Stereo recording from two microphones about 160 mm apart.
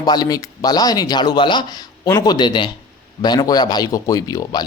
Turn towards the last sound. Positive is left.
turn(degrees=25)  # may be behind; listen again after turning